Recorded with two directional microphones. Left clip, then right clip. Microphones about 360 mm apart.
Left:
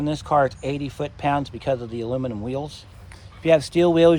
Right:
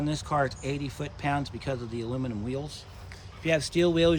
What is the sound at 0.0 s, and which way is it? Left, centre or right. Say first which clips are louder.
Speech: left 8 dB; centre.